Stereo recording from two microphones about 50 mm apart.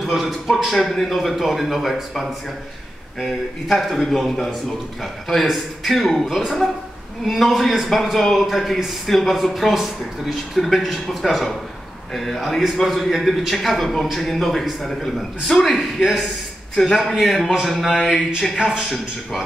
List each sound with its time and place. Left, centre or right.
0.0 s a man's voice: centre